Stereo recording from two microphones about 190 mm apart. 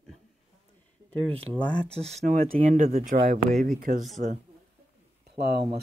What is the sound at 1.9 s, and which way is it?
Speech, 35° right (ahead or behind).